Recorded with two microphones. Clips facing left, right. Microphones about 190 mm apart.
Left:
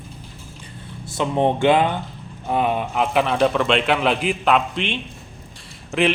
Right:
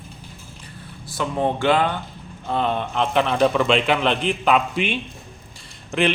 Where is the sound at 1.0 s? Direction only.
20° left (ahead or behind).